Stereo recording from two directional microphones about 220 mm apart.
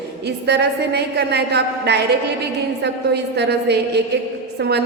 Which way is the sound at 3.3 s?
50° right (ahead or behind).